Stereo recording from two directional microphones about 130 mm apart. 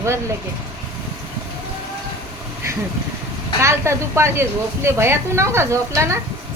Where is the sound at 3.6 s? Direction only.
20° right (ahead or behind).